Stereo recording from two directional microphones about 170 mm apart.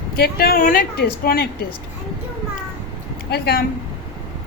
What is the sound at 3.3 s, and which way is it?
Speech, 70° left (ahead or behind).